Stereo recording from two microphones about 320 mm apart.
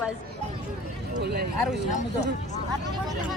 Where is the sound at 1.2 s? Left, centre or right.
Right.